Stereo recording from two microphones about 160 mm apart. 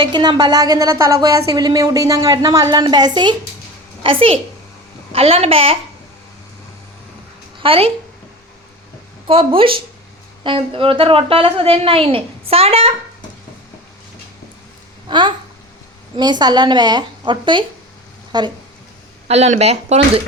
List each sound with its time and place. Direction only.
0.0 s a woman's voice: 25° right (ahead or behind)
7.6 s a woman's voice: 35° right (ahead or behind)
9.2 s a woman's voice: 35° right (ahead or behind)
16.1 s speech: 25° right (ahead or behind)
19.3 s a woman's voice: 40° right (ahead or behind)